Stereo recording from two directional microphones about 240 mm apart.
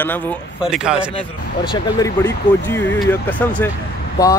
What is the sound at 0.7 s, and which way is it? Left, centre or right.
Speech, centre.